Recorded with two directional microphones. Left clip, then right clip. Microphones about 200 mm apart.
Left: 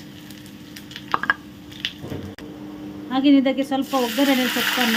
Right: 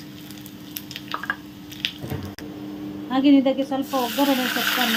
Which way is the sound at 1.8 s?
10° left (ahead or behind).